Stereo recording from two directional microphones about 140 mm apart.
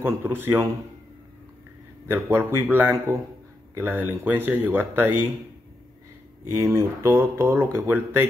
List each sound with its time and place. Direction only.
0.0 s speech: 15° right (ahead or behind)
2.0 s speech: 15° right (ahead or behind)
6.5 s speech: 20° right (ahead or behind)